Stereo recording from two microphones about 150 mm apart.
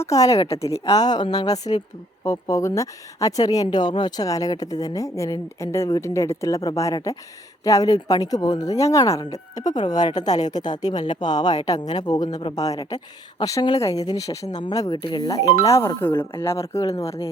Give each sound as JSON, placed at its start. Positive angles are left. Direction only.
{"t": 0.0, "sound": "speech", "side_deg": 20}